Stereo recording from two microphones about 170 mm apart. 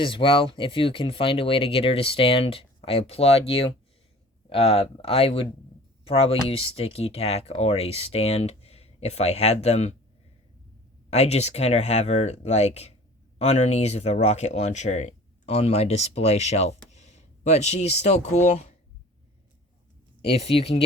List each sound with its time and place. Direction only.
0.0 s speech: 30° left (ahead or behind)
11.1 s speech: 40° left (ahead or behind)
20.2 s speech: 35° left (ahead or behind)